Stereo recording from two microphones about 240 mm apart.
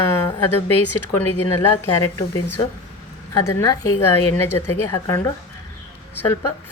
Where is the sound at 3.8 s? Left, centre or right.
Left.